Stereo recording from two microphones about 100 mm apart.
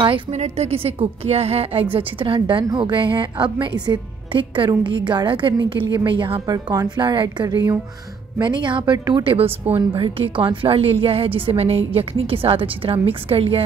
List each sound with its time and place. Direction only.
0.4 s a woman's voice: 90° right; by 6.4 s 55° right (ahead or behind)
6.4 s a woman's voice: 40° right (ahead or behind); by 13.7 s 70° right (ahead or behind)